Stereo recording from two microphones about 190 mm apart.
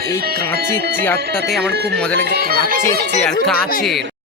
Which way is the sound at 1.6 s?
60° right (ahead or behind).